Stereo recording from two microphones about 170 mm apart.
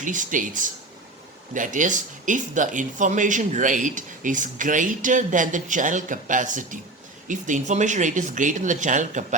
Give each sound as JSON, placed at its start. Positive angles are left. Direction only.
{"t": 0.0, "sound": "speech", "side_deg": -50}